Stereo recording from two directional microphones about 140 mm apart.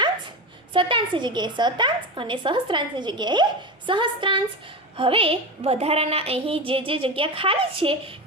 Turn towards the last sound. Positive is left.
turn(degrees=-40)  # may be behind; listen again after turning